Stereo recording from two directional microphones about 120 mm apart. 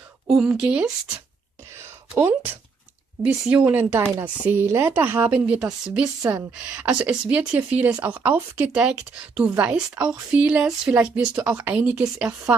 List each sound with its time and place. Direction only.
0.4 s speech: 5° right (ahead or behind)